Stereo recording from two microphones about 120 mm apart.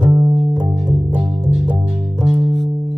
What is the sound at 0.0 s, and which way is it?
Music, 40° right (ahead or behind).